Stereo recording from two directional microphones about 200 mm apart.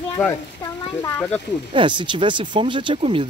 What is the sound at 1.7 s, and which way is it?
Speech, 25° right (ahead or behind).